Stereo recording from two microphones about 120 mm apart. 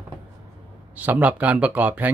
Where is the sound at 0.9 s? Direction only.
15° right (ahead or behind).